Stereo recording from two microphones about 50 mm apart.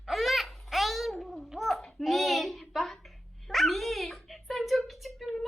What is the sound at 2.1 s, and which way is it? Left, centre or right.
Speech, centre.